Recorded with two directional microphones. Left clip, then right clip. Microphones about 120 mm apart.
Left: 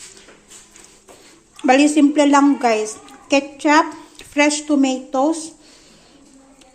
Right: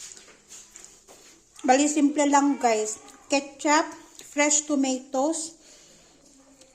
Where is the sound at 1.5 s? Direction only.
10° right (ahead or behind).